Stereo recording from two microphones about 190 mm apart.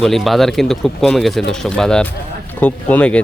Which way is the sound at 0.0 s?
Centre (ahead or behind).